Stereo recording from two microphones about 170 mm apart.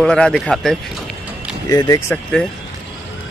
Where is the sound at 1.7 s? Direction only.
20° left (ahead or behind).